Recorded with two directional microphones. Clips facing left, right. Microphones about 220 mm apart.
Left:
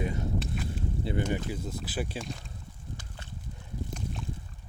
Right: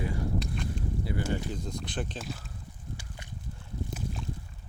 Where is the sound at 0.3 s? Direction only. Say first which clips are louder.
Even; 5° left (ahead or behind).